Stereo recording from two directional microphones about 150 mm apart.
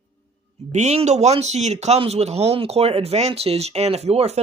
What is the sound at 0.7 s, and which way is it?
Speech, 50° right (ahead or behind).